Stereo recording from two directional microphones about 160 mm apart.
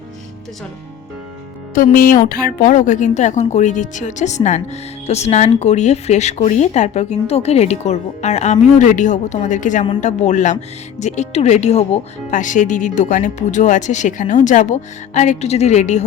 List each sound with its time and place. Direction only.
1.7 s a woman's voice: 60° left (ahead or behind)